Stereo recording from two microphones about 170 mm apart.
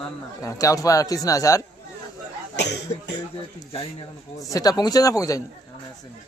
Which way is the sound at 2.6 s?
80° left.